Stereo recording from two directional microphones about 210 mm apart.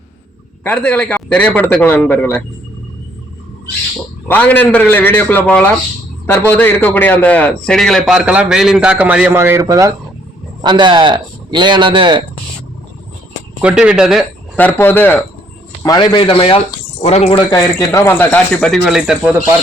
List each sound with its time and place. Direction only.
0.6 s speech: 5° left (ahead or behind)
4.3 s a man's voice: 10° left (ahead or behind); by 12.2 s 25° right (ahead or behind)
13.6 s a man's voice: 5° right (ahead or behind)
15.8 s speech: 20° left (ahead or behind); by 19.4 s 5° right (ahead or behind)